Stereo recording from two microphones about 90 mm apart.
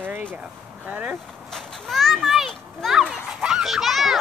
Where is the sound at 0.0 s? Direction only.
20° right (ahead or behind).